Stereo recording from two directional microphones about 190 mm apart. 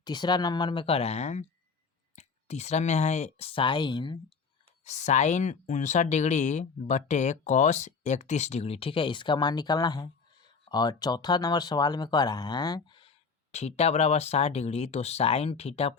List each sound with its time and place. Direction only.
0.0 s speech: 20° left (ahead or behind)
4.8 s speech: 40° left (ahead or behind); by 13.1 s 25° left (ahead or behind)
13.5 s speech: 35° left (ahead or behind)